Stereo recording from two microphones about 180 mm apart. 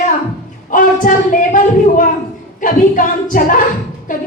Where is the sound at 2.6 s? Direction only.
45° left (ahead or behind).